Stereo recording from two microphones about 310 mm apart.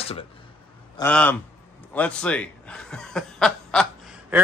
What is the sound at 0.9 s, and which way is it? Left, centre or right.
A man's voice, centre.